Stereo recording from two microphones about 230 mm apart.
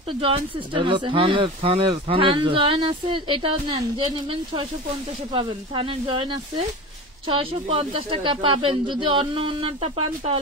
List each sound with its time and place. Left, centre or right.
0.2 s speech: right
5.3 s speech: right